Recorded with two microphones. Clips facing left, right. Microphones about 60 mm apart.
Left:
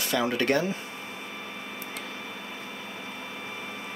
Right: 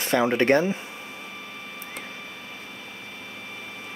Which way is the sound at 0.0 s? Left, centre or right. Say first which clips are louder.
Right 5 dB; right.